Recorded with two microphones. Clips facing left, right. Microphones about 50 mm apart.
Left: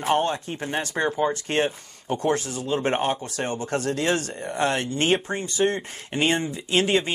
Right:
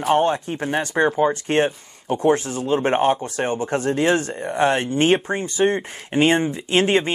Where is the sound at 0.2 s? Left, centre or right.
Right.